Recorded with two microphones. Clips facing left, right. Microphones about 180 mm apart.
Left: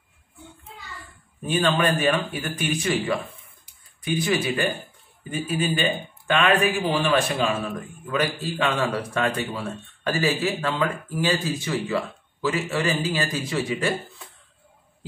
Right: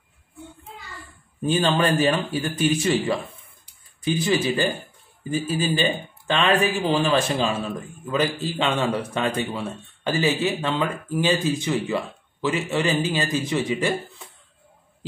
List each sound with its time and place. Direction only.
1.4 s speech: 30° right (ahead or behind)